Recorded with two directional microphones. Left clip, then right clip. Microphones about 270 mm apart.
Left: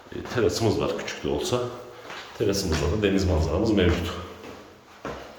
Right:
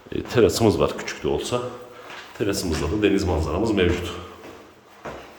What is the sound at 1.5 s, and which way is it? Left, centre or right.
Speech, centre.